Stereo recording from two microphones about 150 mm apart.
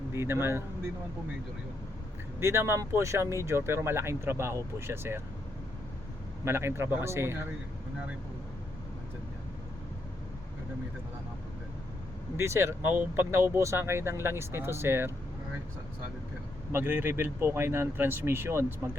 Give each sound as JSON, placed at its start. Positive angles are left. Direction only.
{"t": 0.1, "sound": "speech", "side_deg": -15}
{"t": 2.4, "sound": "speech", "side_deg": -15}
{"t": 6.4, "sound": "speech", "side_deg": -15}
{"t": 12.4, "sound": "speech", "side_deg": -15}
{"t": 16.7, "sound": "speech", "side_deg": -15}